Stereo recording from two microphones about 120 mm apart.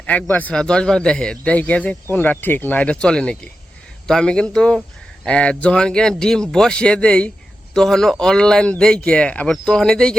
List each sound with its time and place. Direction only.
0.0 s a man's voice: 10° left (ahead or behind)